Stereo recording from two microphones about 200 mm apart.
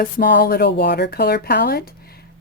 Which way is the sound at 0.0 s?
55° left (ahead or behind).